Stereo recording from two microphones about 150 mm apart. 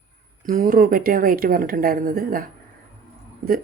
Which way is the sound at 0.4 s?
70° right (ahead or behind).